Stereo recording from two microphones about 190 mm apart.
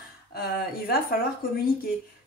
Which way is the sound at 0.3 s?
55° left (ahead or behind).